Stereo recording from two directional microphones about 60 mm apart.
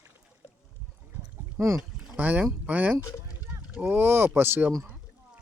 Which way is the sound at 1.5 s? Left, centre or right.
Right.